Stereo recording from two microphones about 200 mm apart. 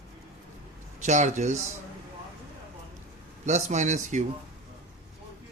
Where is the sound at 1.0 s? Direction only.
35° right (ahead or behind).